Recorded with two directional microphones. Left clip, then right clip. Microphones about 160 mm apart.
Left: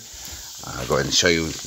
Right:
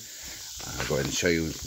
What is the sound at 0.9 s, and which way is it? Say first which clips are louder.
Speech: left 8 dB; 20° right (ahead or behind).